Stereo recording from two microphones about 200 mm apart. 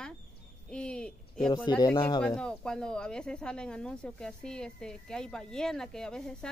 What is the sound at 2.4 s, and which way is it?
Speech, 5° left (ahead or behind).